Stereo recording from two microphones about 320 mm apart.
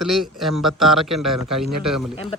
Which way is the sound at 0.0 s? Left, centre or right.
Centre.